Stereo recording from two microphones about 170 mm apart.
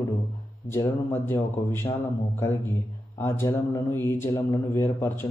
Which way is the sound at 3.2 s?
15° left (ahead or behind).